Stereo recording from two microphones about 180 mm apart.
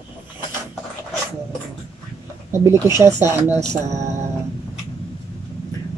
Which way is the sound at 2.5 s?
15° right (ahead or behind).